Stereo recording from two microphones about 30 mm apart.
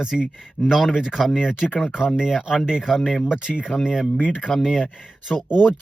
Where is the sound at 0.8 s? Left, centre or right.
Centre.